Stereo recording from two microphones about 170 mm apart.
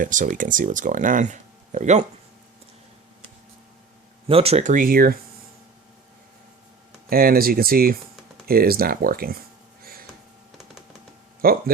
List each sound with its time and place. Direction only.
0.0 s speech: 50° right (ahead or behind)
4.3 s speech: 35° right (ahead or behind); by 5.1 s 60° right (ahead or behind)
7.1 s speech: 60° right (ahead or behind)
9.8 s a sound: 60° right (ahead or behind)
11.4 s speech: 60° right (ahead or behind)